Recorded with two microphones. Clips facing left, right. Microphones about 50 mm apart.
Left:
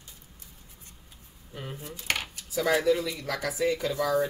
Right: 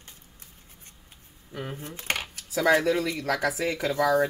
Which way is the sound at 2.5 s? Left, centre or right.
Right.